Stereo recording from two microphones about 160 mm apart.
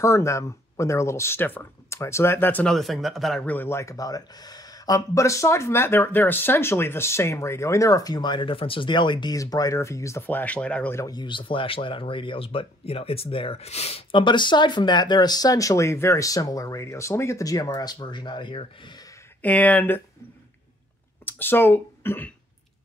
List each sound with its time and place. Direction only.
0.0 s speech: 20° left (ahead or behind)
19.4 s speech: 10° left (ahead or behind)
21.3 s speech: 15° left (ahead or behind)